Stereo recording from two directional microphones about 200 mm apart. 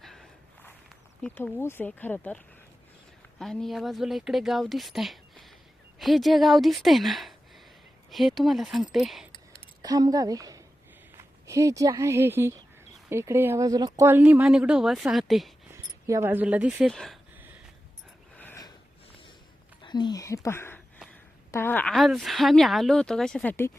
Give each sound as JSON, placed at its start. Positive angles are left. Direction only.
{"t": 0.0, "sound": "walk", "side_deg": 0}
{"t": 3.3, "sound": "a woman's voice", "side_deg": 0}
{"t": 9.8, "sound": "a woman's voice", "side_deg": -20}
{"t": 15.7, "sound": "speech", "side_deg": -15}
{"t": 18.3, "sound": "gasp", "side_deg": 10}
{"t": 19.8, "sound": "a woman's voice", "side_deg": 20}